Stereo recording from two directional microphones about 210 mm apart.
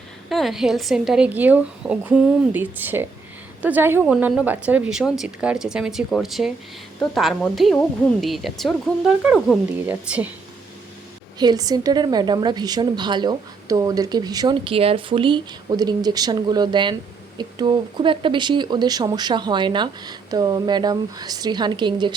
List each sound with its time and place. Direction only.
0.3 s a woman's voice: centre (ahead or behind)
11.3 s a woman's voice: 20° right (ahead or behind)